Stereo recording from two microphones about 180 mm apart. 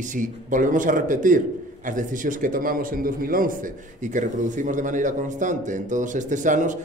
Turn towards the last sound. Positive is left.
turn(degrees=-45)  # may be behind; listen again after turning